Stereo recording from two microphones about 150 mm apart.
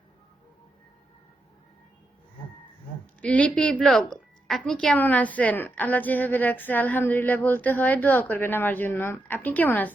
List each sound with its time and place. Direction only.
3.2 s a woman's voice: 10° left (ahead or behind)